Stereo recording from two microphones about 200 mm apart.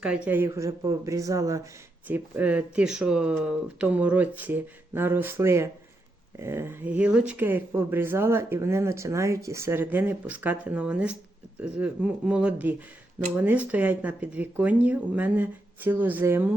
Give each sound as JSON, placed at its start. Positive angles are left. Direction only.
{"t": 0.0, "sound": "speech", "side_deg": -5}